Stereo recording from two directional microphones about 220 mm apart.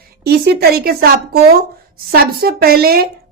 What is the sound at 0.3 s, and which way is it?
A woman's voice, 45° right (ahead or behind).